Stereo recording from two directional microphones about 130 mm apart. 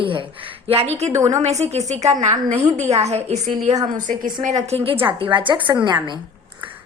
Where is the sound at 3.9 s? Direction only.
80° right; by 6.2 s 35° right (ahead or behind).